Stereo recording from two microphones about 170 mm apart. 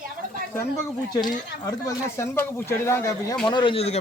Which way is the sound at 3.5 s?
30° left (ahead or behind).